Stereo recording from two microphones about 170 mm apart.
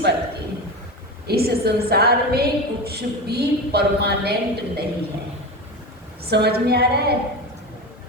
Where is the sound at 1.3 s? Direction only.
65° right (ahead or behind).